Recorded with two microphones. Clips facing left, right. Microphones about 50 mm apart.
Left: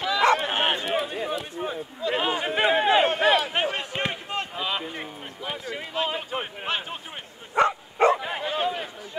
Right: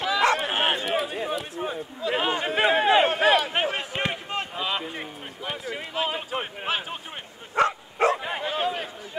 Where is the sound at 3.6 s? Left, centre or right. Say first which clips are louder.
Even; centre.